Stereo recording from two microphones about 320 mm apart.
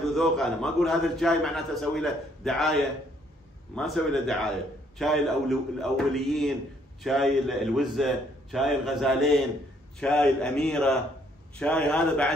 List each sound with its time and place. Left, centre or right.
0.0 s a man's voice: centre